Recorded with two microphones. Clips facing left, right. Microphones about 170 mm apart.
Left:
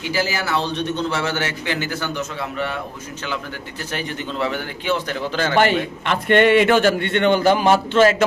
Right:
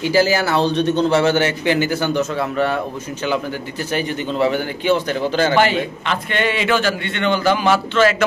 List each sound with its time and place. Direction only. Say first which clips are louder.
0.1 s a man's voice: right 6 dB; 35° right (ahead or behind); by 2.1 s 15° right (ahead or behind)
2.3 s a man's voice: right 6 dB; 40° right (ahead or behind)
3.9 s a man's voice: right 5 dB; 5° right (ahead or behind)
6.2 s a man's voice: left 8 dB; 60° left (ahead or behind); by 8.2 s 45° left (ahead or behind)